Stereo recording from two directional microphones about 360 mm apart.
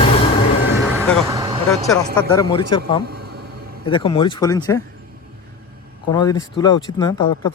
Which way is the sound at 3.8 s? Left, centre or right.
Centre.